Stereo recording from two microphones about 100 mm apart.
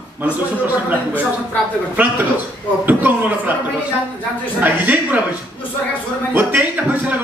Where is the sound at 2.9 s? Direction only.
15° right (ahead or behind).